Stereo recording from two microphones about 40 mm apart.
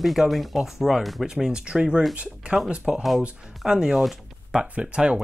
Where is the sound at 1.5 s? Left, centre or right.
Right.